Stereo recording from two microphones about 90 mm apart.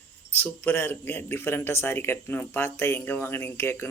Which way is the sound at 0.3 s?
25° left (ahead or behind).